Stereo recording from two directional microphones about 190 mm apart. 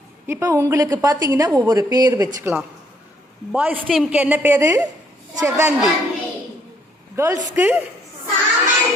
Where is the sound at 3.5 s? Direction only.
10° right (ahead or behind).